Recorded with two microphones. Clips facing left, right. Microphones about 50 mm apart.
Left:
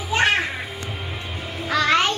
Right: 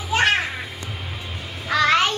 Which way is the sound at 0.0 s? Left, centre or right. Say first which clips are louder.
Even; centre.